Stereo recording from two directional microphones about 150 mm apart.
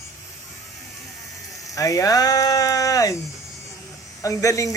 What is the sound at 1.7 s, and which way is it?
Speech, 20° left (ahead or behind).